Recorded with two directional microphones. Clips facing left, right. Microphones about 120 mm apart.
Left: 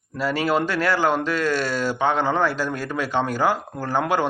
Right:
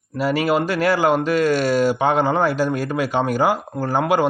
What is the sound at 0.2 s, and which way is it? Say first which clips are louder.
Speech: right 3 dB; 15° right (ahead or behind).